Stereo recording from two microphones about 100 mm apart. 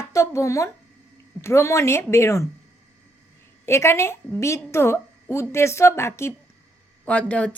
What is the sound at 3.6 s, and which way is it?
A woman's voice, 25° left (ahead or behind).